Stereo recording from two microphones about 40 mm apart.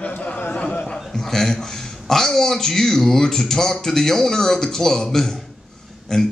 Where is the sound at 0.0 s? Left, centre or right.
Left.